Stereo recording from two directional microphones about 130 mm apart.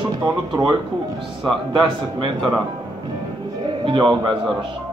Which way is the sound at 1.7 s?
40° right (ahead or behind).